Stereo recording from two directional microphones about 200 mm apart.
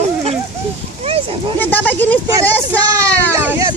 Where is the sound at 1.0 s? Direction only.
30° right (ahead or behind).